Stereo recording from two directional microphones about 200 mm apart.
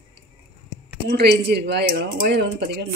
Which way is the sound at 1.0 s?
55° right (ahead or behind).